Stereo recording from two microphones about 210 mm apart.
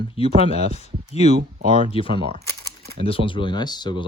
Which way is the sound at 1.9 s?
25° left (ahead or behind).